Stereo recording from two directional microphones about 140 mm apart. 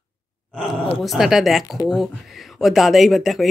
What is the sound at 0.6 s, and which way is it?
Speech, centre (ahead or behind).